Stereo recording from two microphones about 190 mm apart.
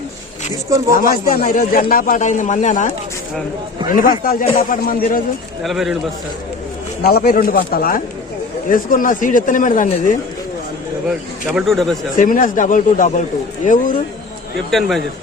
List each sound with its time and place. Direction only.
0.9 s a man's voice: 50° left (ahead or behind)
5.6 s speech: centre (ahead or behind)
7.0 s a man's voice: 55° left (ahead or behind)
11.4 s speech: centre (ahead or behind)
12.1 s a man's voice: 45° left (ahead or behind)
14.7 s speech: centre (ahead or behind)